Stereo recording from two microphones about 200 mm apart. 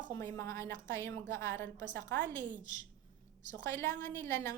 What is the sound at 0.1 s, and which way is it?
A woman's voice, 15° left (ahead or behind).